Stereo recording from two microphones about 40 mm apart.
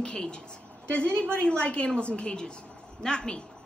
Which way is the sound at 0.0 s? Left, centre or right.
Left.